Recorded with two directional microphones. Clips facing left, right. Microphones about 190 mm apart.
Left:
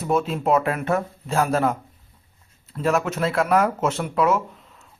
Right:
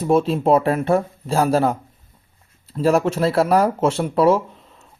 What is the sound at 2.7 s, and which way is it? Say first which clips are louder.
Speech: right 5 dB; 30° right (ahead or behind).